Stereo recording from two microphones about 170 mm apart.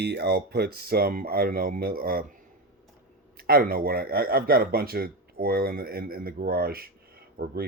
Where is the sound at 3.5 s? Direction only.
60° right (ahead or behind).